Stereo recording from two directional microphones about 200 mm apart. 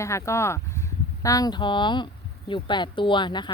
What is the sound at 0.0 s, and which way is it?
Speech, 15° left (ahead or behind).